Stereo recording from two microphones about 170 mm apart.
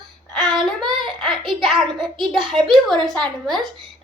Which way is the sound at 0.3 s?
5° left (ahead or behind).